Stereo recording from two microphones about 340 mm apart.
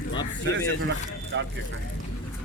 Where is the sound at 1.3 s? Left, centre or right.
Right.